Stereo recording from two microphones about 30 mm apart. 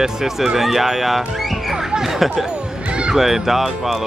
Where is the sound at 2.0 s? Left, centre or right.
Centre.